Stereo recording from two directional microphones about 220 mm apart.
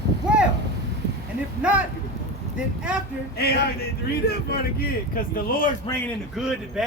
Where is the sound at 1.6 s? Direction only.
5° right (ahead or behind).